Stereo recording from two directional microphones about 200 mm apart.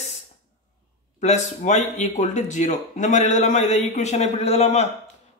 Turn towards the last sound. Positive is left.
turn(degrees=35)  # may be behind; listen again after turning